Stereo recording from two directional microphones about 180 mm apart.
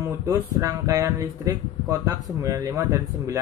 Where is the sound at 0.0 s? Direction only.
15° right (ahead or behind).